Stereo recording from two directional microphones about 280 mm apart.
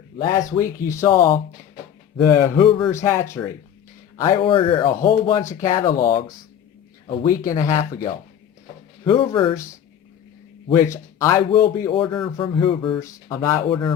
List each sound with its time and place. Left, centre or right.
0.2 s speech: left
0.9 s speech: centre
10.8 s speech: centre